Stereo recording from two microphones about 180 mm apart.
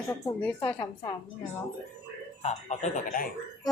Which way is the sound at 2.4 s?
40° left (ahead or behind).